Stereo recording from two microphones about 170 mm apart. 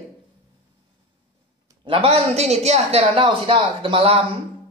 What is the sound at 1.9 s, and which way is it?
Speech, 35° right (ahead or behind).